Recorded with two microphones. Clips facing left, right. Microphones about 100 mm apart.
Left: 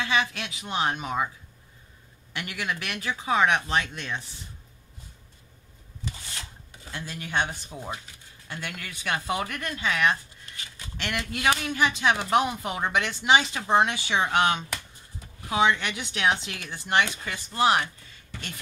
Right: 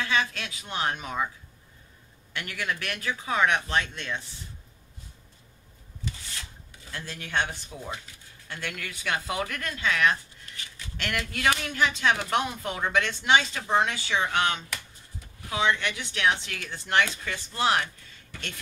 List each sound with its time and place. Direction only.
0.2 s speech: 5° left (ahead or behind)
2.3 s speech: 10° left (ahead or behind)
6.9 s speech: 10° left (ahead or behind)